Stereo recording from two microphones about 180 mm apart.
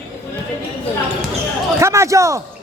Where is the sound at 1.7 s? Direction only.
15° right (ahead or behind).